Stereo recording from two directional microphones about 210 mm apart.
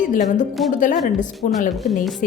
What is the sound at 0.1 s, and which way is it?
A woman's voice, 35° left (ahead or behind).